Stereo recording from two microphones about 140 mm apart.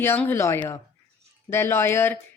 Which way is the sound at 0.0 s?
15° left (ahead or behind).